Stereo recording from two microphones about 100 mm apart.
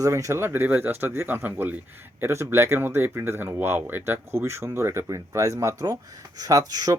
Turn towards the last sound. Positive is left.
turn(degrees=-40)  # may be behind; listen again after turning